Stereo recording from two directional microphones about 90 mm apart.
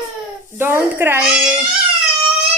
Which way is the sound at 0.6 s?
25° right (ahead or behind).